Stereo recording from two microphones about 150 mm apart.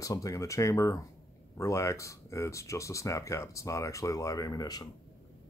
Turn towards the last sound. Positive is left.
turn(degrees=25)  # may be behind; listen again after turning